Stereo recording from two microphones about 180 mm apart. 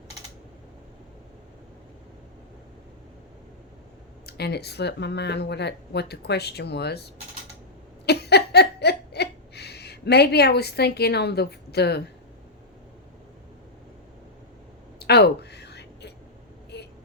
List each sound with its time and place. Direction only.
4.3 s speech: 65° left (ahead or behind)
8.0 s laughter: 65° left (ahead or behind)
14.9 s whispering: 65° left (ahead or behind)
16.7 s vehicle: 65° left (ahead or behind)